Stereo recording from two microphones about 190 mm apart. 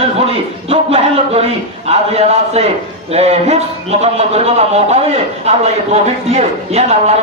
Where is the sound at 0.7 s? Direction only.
30° right (ahead or behind).